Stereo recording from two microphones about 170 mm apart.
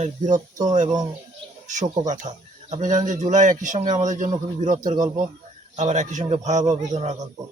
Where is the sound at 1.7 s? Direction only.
45° right (ahead or behind).